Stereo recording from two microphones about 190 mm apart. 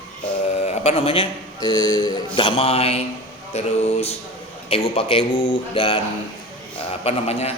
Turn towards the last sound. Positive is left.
turn(degrees=35)  # may be behind; listen again after turning